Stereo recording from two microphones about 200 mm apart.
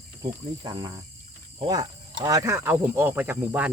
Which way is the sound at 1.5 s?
20° right (ahead or behind).